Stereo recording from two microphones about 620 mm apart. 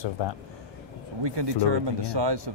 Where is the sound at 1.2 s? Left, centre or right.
Right.